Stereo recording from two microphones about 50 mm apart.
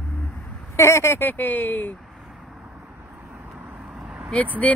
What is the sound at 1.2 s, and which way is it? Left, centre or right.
Speech, left.